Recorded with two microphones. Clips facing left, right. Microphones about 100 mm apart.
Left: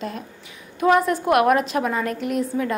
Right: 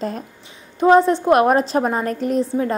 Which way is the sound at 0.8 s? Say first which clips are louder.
Right 5 dB; 30° right (ahead or behind).